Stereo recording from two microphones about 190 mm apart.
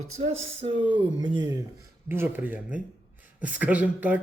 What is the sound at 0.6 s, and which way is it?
Speech, 25° right (ahead or behind).